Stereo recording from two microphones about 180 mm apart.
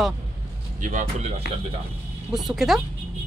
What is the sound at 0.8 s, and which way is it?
Speech, 45° right (ahead or behind).